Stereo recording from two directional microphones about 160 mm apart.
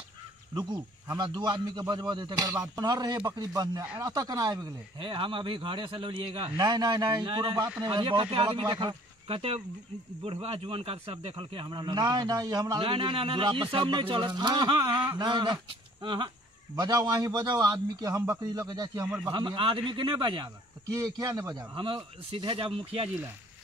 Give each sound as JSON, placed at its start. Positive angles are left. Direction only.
{"t": 0.6, "sound": "a man's voice", "side_deg": -30}
{"t": 6.6, "sound": "a man's voice", "side_deg": -20}
{"t": 19.0, "sound": "a man's voice", "side_deg": -5}
{"t": 19.3, "sound": "a man's voice", "side_deg": -30}